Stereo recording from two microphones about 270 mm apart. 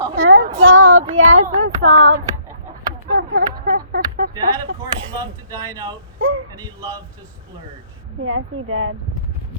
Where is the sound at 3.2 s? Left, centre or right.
Right.